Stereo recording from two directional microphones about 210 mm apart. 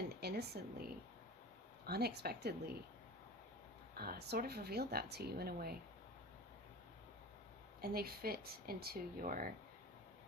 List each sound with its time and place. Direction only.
0.2 s speech: 50° right (ahead or behind)
1.9 s speech: 50° right (ahead or behind)
3.9 s speech: 45° right (ahead or behind)
7.8 s speech: 45° right (ahead or behind)